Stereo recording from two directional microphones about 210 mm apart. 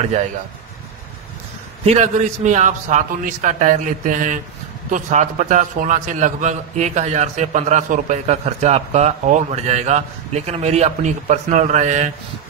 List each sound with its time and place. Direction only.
0.0 s a man's voice: 30° right (ahead or behind)
1.9 s a man's voice: 35° right (ahead or behind)